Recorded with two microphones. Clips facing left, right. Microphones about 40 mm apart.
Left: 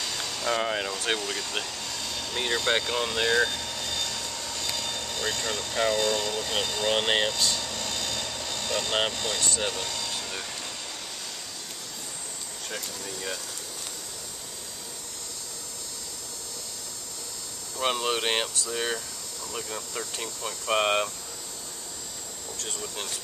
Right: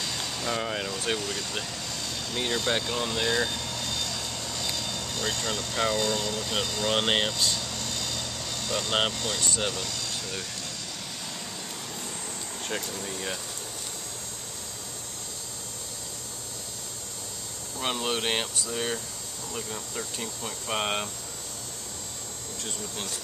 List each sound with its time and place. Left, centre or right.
0.0 s vehicle: centre
0.6 s speech: centre
4.4 s vehicle: centre
5.5 s speech: centre
6.0 s speech: centre
6.9 s speech: centre
7.5 s air conditioning: centre
7.8 s vehicle: left
8.6 s speech: centre
9.7 s vehicle: centre
12.7 s speech: right
17.8 s speech: centre